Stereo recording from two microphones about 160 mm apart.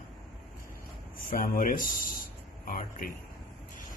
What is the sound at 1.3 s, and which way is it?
A man's voice, 60° left (ahead or behind).